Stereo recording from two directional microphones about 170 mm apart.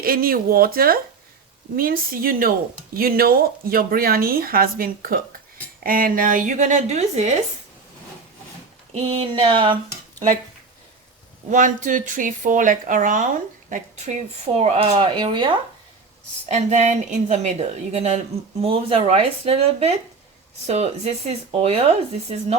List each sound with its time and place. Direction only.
0.0 s a woman's voice: 60° right (ahead or behind); by 7.3 s 40° right (ahead or behind)
8.9 s speech: 35° right (ahead or behind)
11.4 s a woman's voice: 50° right (ahead or behind); by 15.5 s 25° right (ahead or behind)
16.5 s speech: 40° right (ahead or behind)